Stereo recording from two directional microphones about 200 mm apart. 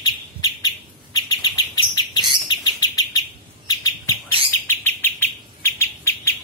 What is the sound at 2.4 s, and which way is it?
Bird, 20° left (ahead or behind).